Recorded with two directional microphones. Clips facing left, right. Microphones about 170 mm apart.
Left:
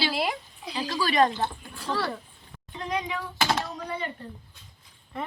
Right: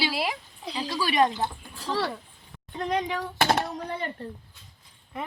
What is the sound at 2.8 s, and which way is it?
Speech, 45° right (ahead or behind).